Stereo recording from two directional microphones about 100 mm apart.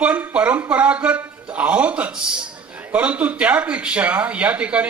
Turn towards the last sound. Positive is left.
turn(degrees=-10)  # may be behind; listen again after turning